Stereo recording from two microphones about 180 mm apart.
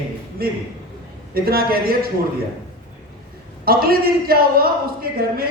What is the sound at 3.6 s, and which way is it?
Speech, 55° right (ahead or behind).